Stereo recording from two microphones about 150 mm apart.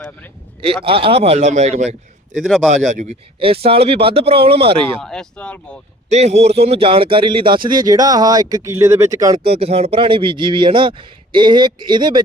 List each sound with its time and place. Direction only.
0.9 s speech: 35° right (ahead or behind)
2.3 s speech: centre (ahead or behind)
2.9 s speech: 55° right (ahead or behind)
3.4 s a man's voice: 40° right (ahead or behind)
4.9 s speech: 5° left (ahead or behind)
6.1 s a man's voice: 45° right (ahead or behind); by 9.3 s 20° right (ahead or behind)
9.3 s a man's voice: 40° right (ahead or behind)